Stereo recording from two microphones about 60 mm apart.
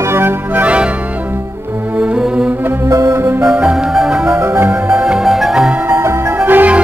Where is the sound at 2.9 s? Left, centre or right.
Right.